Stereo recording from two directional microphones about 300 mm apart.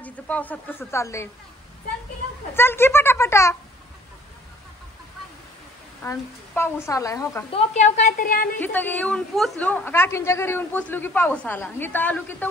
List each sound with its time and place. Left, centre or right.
0.0 s a woman's voice: centre
2.5 s a woman's voice: centre
6.0 s a woman's voice: centre
7.7 s speech: left
8.5 s a woman's voice: centre